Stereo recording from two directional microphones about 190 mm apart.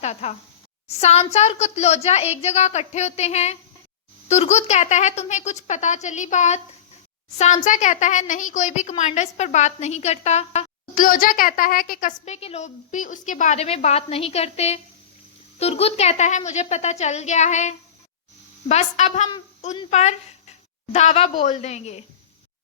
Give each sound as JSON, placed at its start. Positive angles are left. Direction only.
{"t": 0.0, "sound": "a woman's voice", "side_deg": 35}